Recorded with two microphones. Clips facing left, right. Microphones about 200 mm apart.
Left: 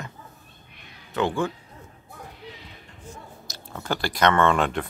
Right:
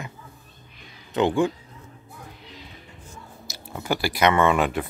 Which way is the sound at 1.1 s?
15° right (ahead or behind).